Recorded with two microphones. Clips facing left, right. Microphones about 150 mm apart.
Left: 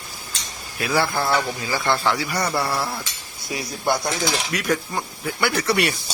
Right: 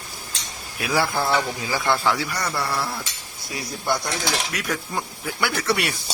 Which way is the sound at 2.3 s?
20° left (ahead or behind).